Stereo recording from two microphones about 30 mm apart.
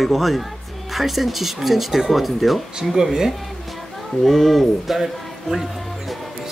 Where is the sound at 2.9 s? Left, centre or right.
Centre.